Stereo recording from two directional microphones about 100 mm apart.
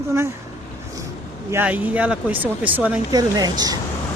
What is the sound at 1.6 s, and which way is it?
Speech, 15° right (ahead or behind).